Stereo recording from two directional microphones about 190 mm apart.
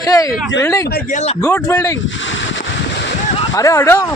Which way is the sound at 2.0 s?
80° left.